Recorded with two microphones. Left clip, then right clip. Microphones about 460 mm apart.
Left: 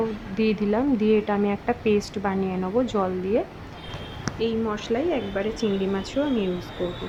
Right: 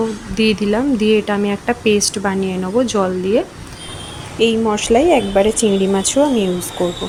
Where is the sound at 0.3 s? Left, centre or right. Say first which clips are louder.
Right 7 dB; left.